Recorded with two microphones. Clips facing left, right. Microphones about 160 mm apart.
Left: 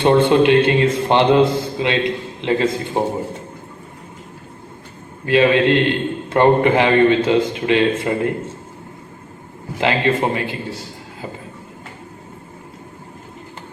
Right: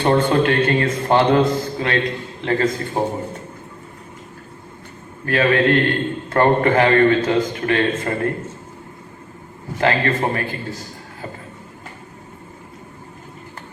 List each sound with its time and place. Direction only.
0.0 s a man's voice: 20° left (ahead or behind)
5.2 s a man's voice: 20° left (ahead or behind)
9.7 s a man's voice: 20° left (ahead or behind)